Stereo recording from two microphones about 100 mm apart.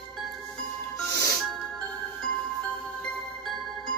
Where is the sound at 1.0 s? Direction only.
30° left (ahead or behind).